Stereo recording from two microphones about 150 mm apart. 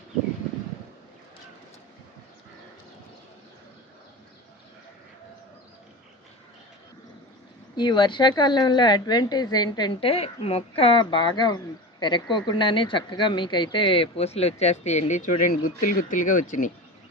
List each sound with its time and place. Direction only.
7.8 s a woman's voice: 30° left (ahead or behind)
10.1 s speech: 40° left (ahead or behind); by 16.7 s 55° left (ahead or behind)